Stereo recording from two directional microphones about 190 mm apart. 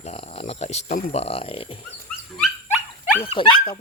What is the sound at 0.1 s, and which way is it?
Speech, 35° left (ahead or behind).